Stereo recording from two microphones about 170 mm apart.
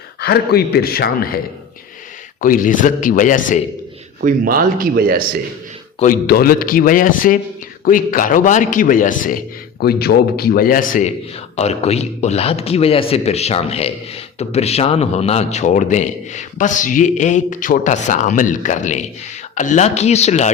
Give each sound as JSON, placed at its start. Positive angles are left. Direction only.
{"t": 0.2, "sound": "a man's voice", "side_deg": 70}
{"t": 2.4, "sound": "a man's voice", "side_deg": 55}
{"t": 4.2, "sound": "speech", "side_deg": -55}
{"t": 6.0, "sound": "a man's voice", "side_deg": 60}
{"t": 9.8, "sound": "a man's voice", "side_deg": 65}
{"t": 11.5, "sound": "a man's voice", "side_deg": 40}